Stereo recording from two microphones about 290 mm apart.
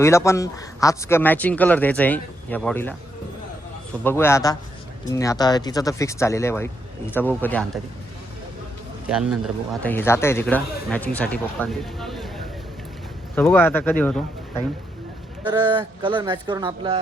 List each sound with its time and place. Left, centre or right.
0.0 s speech: centre
4.0 s speech: centre
9.0 s speech: centre
9.8 s speech: centre
13.3 s speech: centre
15.4 s speech: centre